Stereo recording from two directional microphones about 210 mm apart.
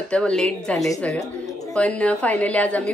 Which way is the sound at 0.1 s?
5° left (ahead or behind).